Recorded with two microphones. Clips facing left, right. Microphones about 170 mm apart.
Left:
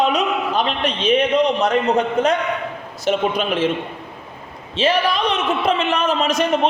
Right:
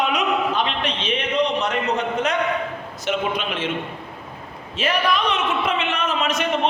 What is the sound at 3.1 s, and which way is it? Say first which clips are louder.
Speech: left 5 dB; 40° left (ahead or behind).